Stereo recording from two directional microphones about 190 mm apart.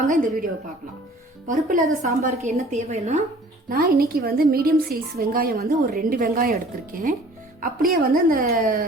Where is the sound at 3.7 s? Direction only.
55° right (ahead or behind).